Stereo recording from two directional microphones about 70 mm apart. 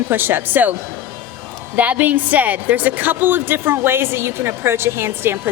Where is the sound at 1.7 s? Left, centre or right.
Right.